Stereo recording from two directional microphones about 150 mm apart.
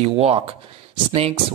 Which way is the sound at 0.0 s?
40° right (ahead or behind).